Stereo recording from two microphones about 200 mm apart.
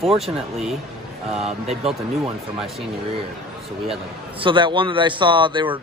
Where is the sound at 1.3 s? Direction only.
30° right (ahead or behind).